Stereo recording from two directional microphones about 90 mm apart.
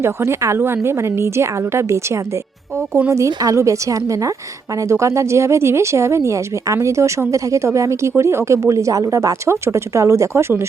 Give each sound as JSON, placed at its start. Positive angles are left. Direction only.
{"t": 0.0, "sound": "speech", "side_deg": -30}